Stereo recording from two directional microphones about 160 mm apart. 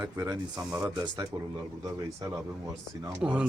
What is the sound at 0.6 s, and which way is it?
Speech, 5° right (ahead or behind).